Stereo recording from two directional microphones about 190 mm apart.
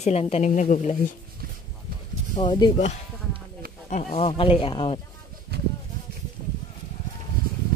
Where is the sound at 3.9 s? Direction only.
35° left (ahead or behind).